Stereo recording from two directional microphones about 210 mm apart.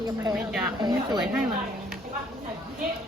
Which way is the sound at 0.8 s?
20° right (ahead or behind).